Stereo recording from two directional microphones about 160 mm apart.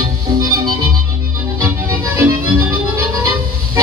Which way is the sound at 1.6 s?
15° right (ahead or behind).